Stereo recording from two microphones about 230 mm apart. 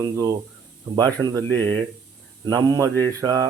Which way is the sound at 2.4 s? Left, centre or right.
Centre.